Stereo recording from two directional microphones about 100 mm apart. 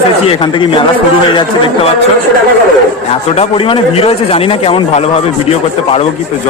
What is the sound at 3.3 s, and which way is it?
A man's voice, 80° left.